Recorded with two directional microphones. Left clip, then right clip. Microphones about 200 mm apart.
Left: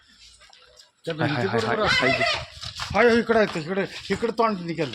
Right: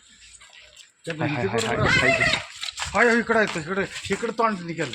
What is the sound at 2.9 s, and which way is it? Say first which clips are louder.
Speech: left 1 dB; 30° left (ahead or behind).